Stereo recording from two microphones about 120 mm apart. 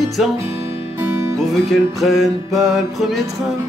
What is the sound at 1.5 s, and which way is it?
Music, centre (ahead or behind).